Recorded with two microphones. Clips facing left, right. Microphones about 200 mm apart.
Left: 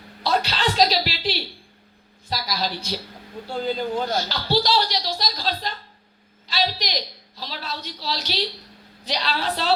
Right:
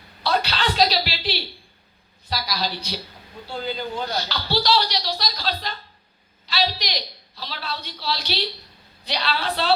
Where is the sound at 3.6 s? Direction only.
45° left (ahead or behind).